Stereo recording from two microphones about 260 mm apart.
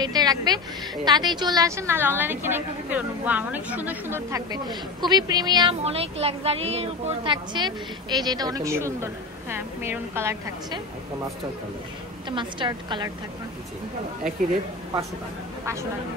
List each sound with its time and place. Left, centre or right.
0.0 s a woman's voice: centre
12.3 s a woman's voice: centre